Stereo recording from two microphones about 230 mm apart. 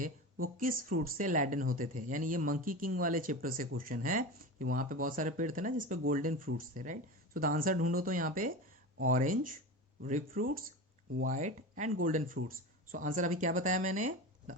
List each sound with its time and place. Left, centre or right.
0.0 s speech: right